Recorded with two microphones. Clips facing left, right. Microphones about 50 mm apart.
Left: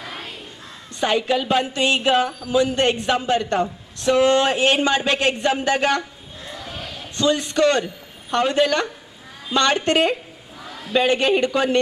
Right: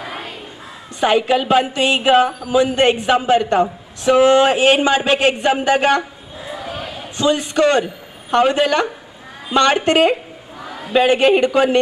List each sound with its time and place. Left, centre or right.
0.0 s crow: centre
0.9 s a woman's voice: right
6.4 s a sound: centre
8.3 s a man's voice: right
10.6 s a sound: centre
11.0 s a man's voice: right